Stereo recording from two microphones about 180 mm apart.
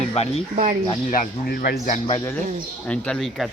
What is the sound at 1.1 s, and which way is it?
Speech, 55° left (ahead or behind).